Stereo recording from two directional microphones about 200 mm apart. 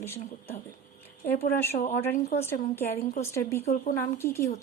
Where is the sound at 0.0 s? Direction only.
15° left (ahead or behind).